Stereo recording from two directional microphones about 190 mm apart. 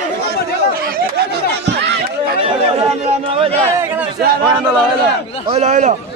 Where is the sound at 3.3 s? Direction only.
30° right (ahead or behind).